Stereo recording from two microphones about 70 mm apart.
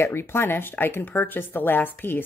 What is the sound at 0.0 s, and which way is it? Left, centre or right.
A woman's voice, left.